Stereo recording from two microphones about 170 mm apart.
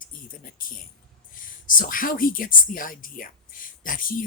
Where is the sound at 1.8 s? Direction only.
55° left (ahead or behind).